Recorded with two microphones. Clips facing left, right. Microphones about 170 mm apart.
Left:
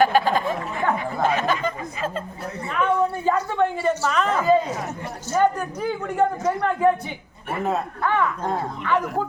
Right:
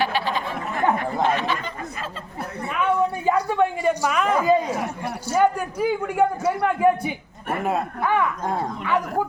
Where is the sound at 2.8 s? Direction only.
15° right (ahead or behind).